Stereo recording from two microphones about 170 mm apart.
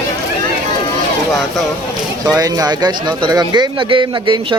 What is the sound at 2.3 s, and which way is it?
Speech, 20° right (ahead or behind).